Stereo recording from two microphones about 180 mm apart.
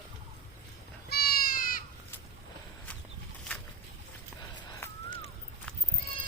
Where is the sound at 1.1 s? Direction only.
60° left (ahead or behind).